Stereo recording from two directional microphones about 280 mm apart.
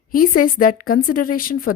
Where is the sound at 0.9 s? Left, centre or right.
Left.